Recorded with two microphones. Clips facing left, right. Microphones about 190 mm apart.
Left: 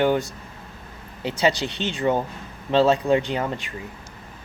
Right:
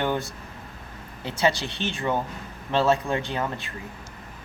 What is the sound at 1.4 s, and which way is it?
Speech, 20° left (ahead or behind).